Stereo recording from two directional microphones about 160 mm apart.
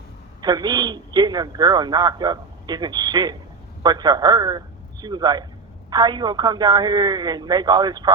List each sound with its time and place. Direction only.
0.4 s a man's voice: 25° right (ahead or behind)